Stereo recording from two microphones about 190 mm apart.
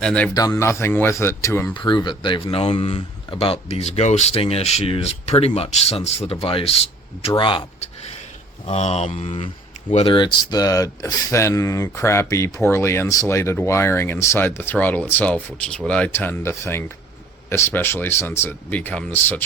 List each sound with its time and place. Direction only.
0.0 s speech: 5° left (ahead or behind)
0.3 s speech: 15° left (ahead or behind)